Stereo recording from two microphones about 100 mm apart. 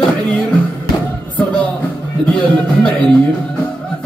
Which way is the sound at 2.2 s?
10° left (ahead or behind).